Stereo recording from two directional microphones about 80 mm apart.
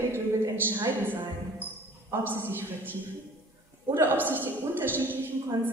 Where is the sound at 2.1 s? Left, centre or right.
Right.